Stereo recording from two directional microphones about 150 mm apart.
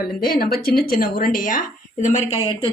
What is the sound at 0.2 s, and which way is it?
A woman's voice, 75° left (ahead or behind).